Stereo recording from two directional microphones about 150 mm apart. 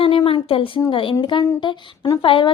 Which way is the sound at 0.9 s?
35° left (ahead or behind).